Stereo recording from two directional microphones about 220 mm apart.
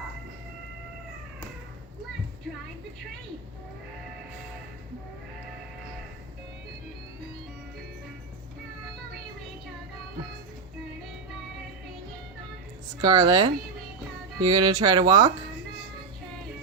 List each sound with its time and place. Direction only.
13.0 s speech: 20° right (ahead or behind)